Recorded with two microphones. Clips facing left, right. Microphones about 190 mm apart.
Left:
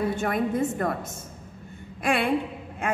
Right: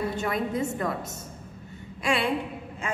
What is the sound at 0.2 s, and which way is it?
Speech, 50° left (ahead or behind).